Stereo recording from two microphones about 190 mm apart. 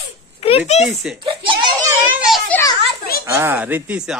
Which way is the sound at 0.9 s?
Centre (ahead or behind).